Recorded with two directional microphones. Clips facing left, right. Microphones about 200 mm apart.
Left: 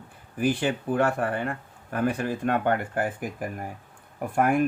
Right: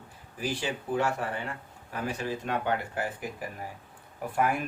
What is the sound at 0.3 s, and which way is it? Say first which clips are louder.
Speech: left 8 dB; 55° left (ahead or behind).